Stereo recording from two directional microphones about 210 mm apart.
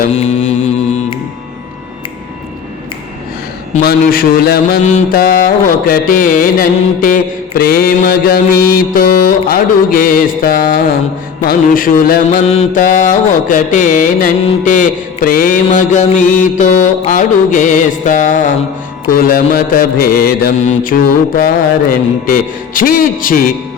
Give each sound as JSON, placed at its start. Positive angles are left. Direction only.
{"t": 0.0, "sound": "mantra", "side_deg": 35}
{"t": 3.8, "sound": "mantra", "side_deg": 45}